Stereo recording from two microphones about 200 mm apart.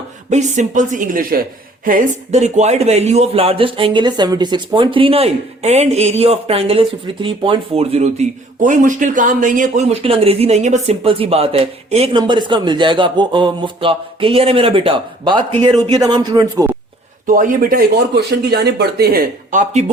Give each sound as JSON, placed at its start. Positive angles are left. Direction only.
{"t": 0.3, "sound": "a woman's voice", "side_deg": -35}
{"t": 17.2, "sound": "speech", "side_deg": -40}